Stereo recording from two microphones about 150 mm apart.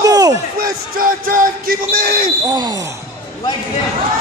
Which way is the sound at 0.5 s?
75° right (ahead or behind).